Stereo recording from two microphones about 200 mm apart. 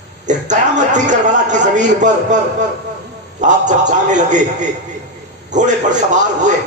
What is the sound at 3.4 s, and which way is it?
A man's voice, 40° right (ahead or behind).